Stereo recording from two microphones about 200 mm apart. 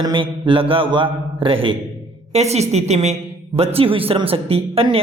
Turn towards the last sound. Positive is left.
turn(degrees=-30)  # may be behind; listen again after turning